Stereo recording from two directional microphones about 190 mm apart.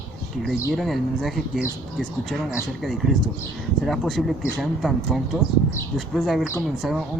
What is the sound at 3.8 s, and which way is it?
Speech, centre (ahead or behind).